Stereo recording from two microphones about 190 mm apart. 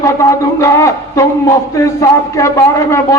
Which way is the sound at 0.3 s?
15° left (ahead or behind).